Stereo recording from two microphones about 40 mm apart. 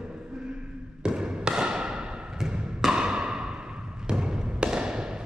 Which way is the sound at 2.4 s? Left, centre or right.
Right.